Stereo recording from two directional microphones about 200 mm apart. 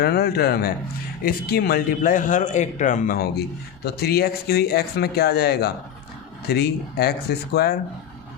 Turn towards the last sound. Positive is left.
turn(degrees=55)  # may be behind; listen again after turning